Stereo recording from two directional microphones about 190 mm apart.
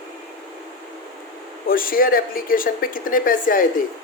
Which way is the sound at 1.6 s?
50° left (ahead or behind).